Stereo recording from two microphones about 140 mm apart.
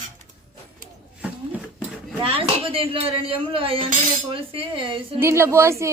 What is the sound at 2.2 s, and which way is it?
Speech, 40° right (ahead or behind).